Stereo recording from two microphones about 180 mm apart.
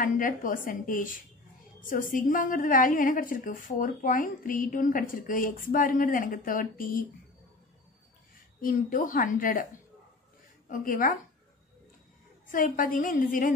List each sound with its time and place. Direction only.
0.0 s a woman's voice: 50° left (ahead or behind)
8.5 s a woman's voice: 50° left (ahead or behind)
10.7 s a woman's voice: 50° left (ahead or behind)
12.4 s a woman's voice: 50° left (ahead or behind)